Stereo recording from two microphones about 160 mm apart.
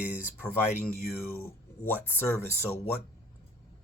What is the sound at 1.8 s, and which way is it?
Speech, 15° left (ahead or behind).